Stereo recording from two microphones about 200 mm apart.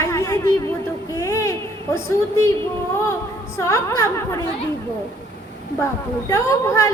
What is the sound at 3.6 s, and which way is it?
Speech, 15° left (ahead or behind).